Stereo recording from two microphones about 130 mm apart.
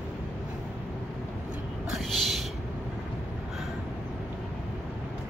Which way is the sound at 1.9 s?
Centre (ahead or behind).